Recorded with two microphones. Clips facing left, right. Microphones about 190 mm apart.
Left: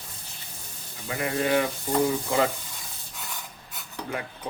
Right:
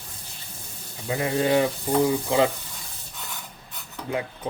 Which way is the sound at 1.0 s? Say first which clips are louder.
Right 3 dB; 25° right (ahead or behind).